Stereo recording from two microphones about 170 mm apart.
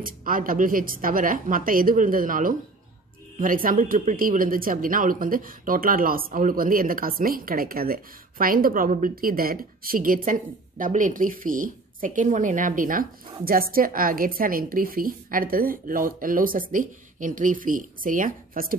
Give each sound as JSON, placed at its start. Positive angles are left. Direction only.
{"t": 0.0, "sound": "speech", "side_deg": -55}